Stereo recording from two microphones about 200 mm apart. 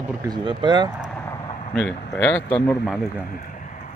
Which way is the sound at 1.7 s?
5° left (ahead or behind).